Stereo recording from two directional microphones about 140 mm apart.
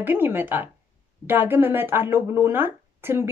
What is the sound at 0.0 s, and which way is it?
Speech, 15° right (ahead or behind).